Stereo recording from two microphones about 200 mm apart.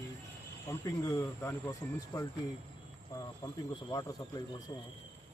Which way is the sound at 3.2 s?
20° left (ahead or behind).